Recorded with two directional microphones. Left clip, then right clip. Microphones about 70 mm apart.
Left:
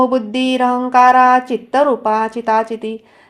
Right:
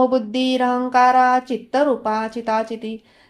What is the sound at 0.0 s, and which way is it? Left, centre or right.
A woman's voice, left.